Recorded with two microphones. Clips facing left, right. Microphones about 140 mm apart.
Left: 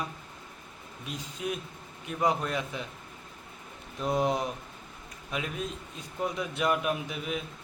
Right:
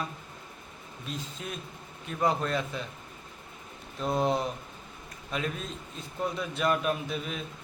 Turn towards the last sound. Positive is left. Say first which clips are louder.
# even
turn(degrees=15)  # may be behind; listen again after turning